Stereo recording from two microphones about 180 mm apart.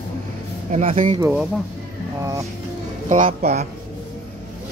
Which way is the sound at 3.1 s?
45° right (ahead or behind).